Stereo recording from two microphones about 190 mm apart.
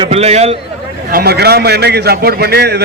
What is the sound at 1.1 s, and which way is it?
A man's voice, 55° right (ahead or behind).